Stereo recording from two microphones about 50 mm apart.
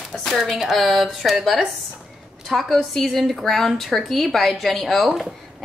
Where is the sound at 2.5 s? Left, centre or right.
Centre.